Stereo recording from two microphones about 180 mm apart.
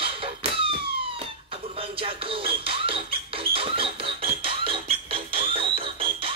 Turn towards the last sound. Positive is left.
turn(degrees=-30)  # may be behind; listen again after turning